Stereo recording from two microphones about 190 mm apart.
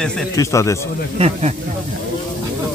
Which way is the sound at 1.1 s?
35° right (ahead or behind).